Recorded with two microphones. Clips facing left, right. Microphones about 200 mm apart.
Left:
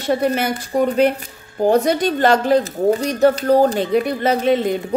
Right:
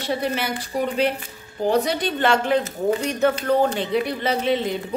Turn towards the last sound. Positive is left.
turn(degrees=45)  # may be behind; listen again after turning